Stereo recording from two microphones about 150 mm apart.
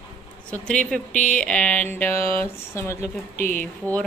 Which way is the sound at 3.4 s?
60° right (ahead or behind).